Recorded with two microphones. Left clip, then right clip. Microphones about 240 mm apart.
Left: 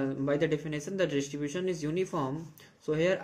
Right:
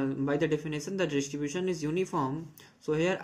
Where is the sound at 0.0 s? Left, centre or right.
Centre.